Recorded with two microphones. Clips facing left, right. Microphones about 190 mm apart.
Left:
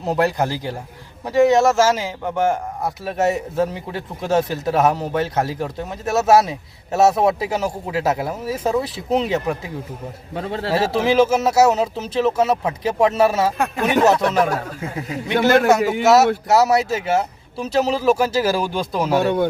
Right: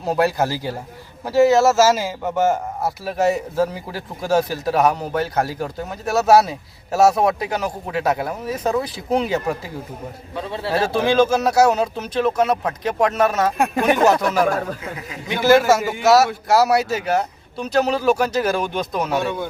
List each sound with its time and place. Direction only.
0.0 s a man's voice: centre (ahead or behind)
10.9 s a man's voice: 5° left (ahead or behind)
15.3 s a man's voice: 65° left (ahead or behind)
15.5 s a man's voice: 5° right (ahead or behind)
19.2 s a man's voice: 60° left (ahead or behind)